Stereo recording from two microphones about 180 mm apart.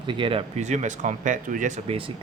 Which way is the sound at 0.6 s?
40° right (ahead or behind).